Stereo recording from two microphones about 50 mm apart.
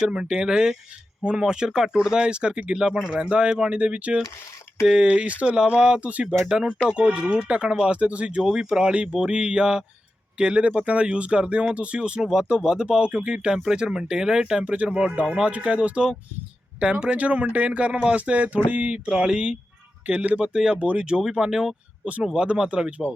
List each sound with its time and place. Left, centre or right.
0.1 s speech: centre
8.4 s speech: centre
14.6 s speech: right
14.8 s speech: centre
17.2 s speech: right; by 20.7 s centre
20.7 s speech: right